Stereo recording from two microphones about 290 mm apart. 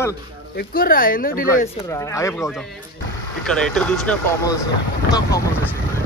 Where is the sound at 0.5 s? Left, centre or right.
Left.